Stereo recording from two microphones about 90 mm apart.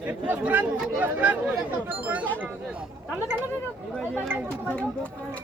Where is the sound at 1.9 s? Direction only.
20° right (ahead or behind).